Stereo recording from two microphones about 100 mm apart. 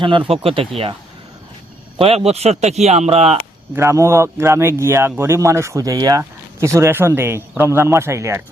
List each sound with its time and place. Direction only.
0.0 s speech: 55° right (ahead or behind)
0.4 s speech: 65° right (ahead or behind)
2.0 s speech: 85° right
3.8 s a man's voice: 30° right (ahead or behind)